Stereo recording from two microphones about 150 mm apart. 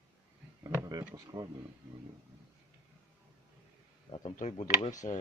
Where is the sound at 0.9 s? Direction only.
25° right (ahead or behind).